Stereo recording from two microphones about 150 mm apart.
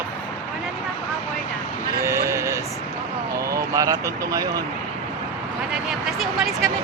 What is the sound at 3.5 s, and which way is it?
Speech, 20° right (ahead or behind).